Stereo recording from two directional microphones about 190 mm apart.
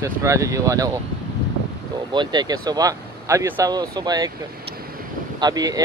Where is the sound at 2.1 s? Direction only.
25° right (ahead or behind).